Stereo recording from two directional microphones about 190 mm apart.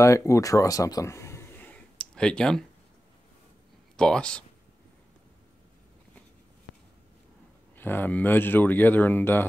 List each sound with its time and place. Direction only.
0.0 s speech: 15° left (ahead or behind)
3.9 s speech: 5° left (ahead or behind)
7.7 s speech: 10° left (ahead or behind)